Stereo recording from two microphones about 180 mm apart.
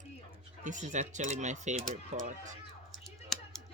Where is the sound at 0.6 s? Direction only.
45° right (ahead or behind).